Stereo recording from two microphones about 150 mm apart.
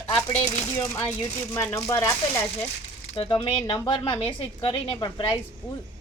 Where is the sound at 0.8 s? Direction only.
15° left (ahead or behind).